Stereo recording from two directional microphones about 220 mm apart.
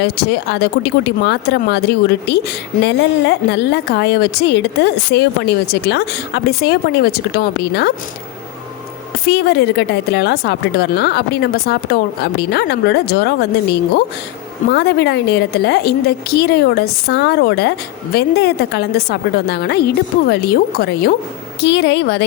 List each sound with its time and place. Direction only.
0.0 s a woman's voice: 50° left (ahead or behind)
9.2 s a woman's voice: 50° left (ahead or behind)